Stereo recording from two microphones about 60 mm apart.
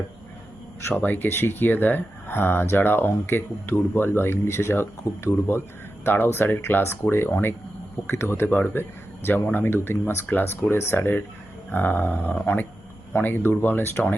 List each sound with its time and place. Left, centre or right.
0.9 s speech: left
8.4 s speech: left